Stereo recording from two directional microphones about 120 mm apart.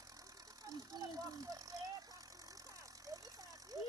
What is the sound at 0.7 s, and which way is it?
Speech, 30° right (ahead or behind).